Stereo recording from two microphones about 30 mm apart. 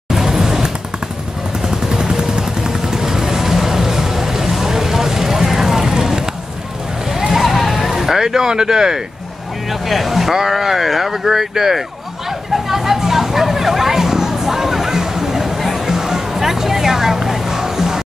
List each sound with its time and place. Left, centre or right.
0.1 s vehicle: centre
1.7 s vehicle: right
7.2 s a sound: centre
9.7 s speech: centre
12.6 s a sound: centre
15.9 s music: centre